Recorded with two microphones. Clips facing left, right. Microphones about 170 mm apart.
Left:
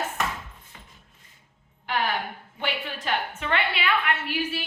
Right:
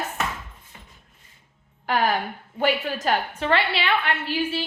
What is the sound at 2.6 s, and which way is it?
A woman's voice, 40° right (ahead or behind).